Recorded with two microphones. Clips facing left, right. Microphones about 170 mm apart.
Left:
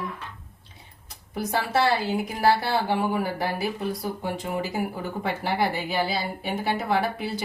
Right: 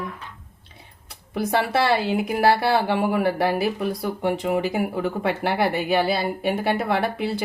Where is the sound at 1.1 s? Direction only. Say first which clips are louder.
Right 5 dB; 65° right (ahead or behind).